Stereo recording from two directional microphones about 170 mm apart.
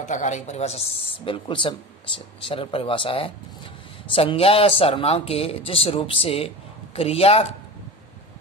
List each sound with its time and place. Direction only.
0.0 s speech: 45° left (ahead or behind)